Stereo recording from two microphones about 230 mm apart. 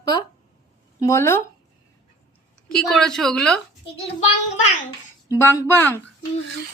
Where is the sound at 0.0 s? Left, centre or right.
Centre.